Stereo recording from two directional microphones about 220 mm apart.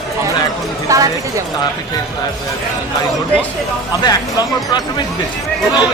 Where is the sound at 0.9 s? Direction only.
15° right (ahead or behind).